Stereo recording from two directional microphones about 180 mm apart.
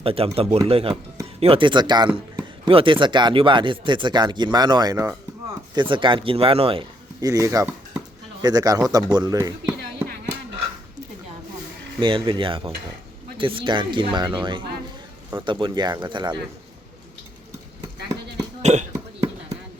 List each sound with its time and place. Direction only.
0.0 s speech: 30° right (ahead or behind)
7.2 s speech: 20° right (ahead or behind)
11.9 s speech: 25° right (ahead or behind)
18.6 s speech: 40° right (ahead or behind)
18.9 s cough: 15° right (ahead or behind)